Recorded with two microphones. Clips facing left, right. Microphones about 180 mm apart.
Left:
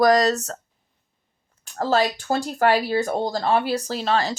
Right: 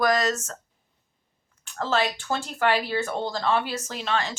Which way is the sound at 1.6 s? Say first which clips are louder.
Left 4 dB; 40° left (ahead or behind).